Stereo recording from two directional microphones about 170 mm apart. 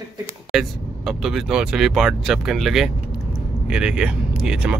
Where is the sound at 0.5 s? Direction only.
Centre (ahead or behind).